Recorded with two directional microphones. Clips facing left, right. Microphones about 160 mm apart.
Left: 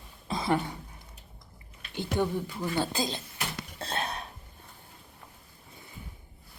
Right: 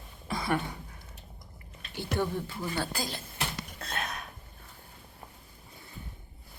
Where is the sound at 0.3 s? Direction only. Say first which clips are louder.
Left 2 dB; 20° left (ahead or behind).